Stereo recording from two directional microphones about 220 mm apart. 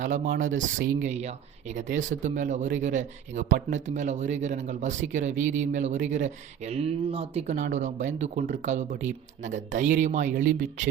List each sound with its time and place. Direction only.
0.0 s speech: 35° right (ahead or behind)